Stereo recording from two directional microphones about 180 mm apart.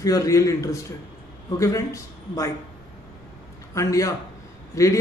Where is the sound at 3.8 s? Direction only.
20° left (ahead or behind).